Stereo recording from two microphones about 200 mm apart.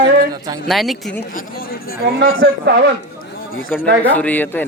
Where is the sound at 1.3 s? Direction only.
50° left (ahead or behind).